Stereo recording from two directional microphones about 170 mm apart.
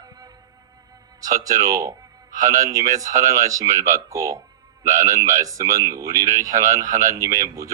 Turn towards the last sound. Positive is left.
turn(degrees=-20)  # may be behind; listen again after turning